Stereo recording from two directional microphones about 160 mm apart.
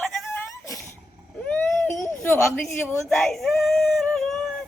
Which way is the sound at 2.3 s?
15° left (ahead or behind).